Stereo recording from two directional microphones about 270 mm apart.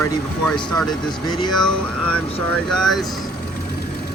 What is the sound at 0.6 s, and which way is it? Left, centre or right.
Speech, centre.